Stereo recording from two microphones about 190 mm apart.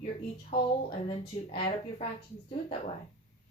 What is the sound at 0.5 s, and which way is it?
A woman's voice, 25° left (ahead or behind).